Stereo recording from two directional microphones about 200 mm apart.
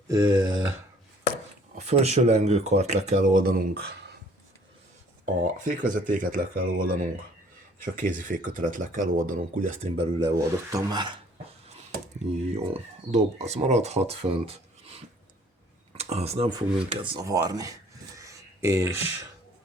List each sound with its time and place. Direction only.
0.1 s speech: 20° right (ahead or behind)
1.8 s speech: 30° right (ahead or behind)
5.2 s speech: 40° right (ahead or behind)
7.9 s speech: 40° right (ahead or behind)
10.3 s speech: 15° right (ahead or behind)
11.7 s speech: 35° right (ahead or behind)
16.0 s speech: 30° right (ahead or behind)
18.2 s a sound: 15° right (ahead or behind)